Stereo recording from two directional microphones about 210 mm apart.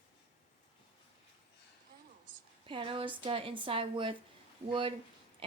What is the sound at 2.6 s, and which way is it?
Speech, 25° right (ahead or behind).